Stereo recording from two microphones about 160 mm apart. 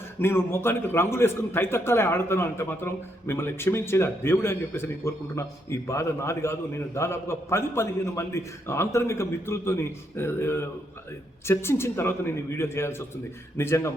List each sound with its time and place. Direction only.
0.2 s a man's voice: 15° left (ahead or behind)